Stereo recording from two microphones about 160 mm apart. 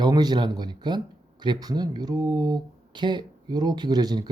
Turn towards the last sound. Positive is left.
turn(degrees=-25)  # may be behind; listen again after turning